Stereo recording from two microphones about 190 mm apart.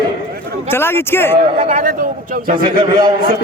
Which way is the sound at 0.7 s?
10° left (ahead or behind).